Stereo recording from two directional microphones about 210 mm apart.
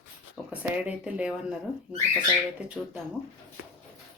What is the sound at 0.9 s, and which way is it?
Speech, 5° right (ahead or behind).